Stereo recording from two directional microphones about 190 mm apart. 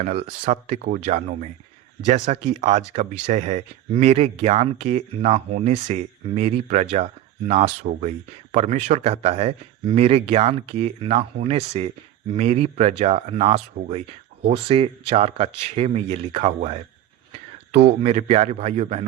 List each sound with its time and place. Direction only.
0.0 s speech: 30° right (ahead or behind)